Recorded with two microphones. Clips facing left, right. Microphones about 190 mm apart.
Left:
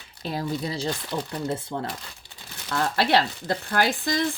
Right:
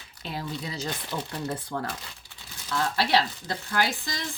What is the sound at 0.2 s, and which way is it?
Speech, 40° left (ahead or behind).